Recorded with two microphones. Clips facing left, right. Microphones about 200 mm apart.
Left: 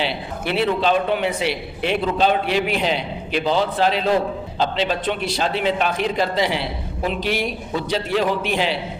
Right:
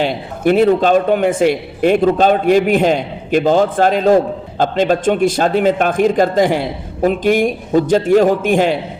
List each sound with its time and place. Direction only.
0.0 s a man's voice: 45° right (ahead or behind)